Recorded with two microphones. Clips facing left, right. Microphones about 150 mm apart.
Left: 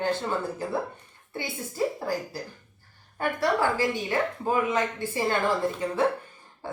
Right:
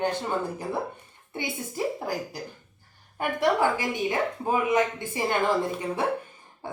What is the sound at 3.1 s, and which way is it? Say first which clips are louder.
Speech: right 1 dB; 15° right (ahead or behind).